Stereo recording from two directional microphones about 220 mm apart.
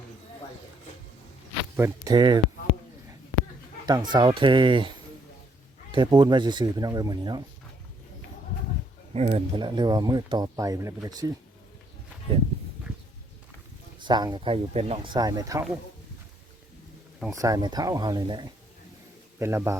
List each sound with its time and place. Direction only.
1.7 s speech: 15° right (ahead or behind)
3.8 s speech: 20° right (ahead or behind)
5.9 s speech: 20° right (ahead or behind)
9.1 s speech: 30° right (ahead or behind)
14.0 s speech: 20° right (ahead or behind)
17.3 s speech: 15° right (ahead or behind)